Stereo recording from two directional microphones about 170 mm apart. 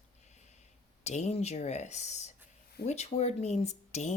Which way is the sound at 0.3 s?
40° left (ahead or behind).